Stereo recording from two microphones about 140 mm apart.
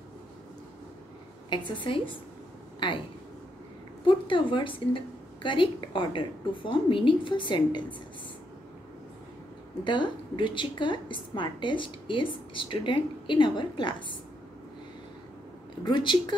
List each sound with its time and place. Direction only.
1.8 s a woman's voice: 35° left (ahead or behind)
4.0 s a woman's voice: 35° left (ahead or behind)
9.8 s a woman's voice: 35° left (ahead or behind)
15.8 s a woman's voice: 35° left (ahead or behind)